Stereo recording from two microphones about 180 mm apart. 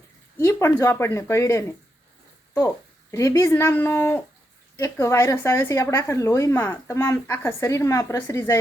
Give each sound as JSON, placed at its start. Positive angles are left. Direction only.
{"t": 0.3, "sound": "a woman's voice", "side_deg": 15}
{"t": 3.1, "sound": "a woman's voice", "side_deg": 15}